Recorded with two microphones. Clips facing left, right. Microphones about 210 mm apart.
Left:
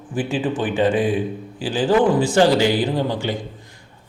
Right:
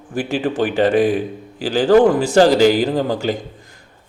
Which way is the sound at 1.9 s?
45° right (ahead or behind).